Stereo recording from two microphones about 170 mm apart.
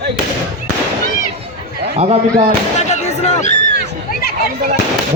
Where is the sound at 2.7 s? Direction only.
40° left (ahead or behind).